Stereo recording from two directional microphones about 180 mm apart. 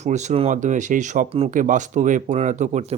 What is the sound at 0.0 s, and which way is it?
Speech, 40° right (ahead or behind).